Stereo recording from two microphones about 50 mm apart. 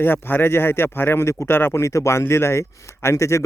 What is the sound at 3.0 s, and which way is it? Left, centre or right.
Speech, left.